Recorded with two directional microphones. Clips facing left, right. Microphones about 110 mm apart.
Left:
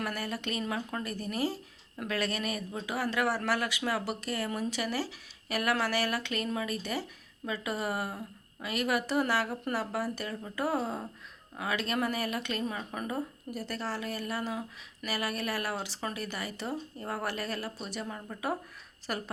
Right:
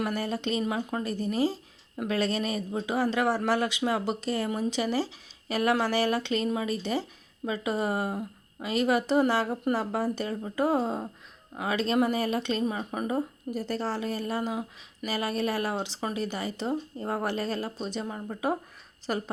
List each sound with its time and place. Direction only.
0.0 s speech: 25° right (ahead or behind)